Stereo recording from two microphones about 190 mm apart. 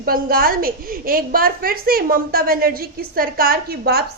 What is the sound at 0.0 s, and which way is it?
A woman's voice, 50° right (ahead or behind).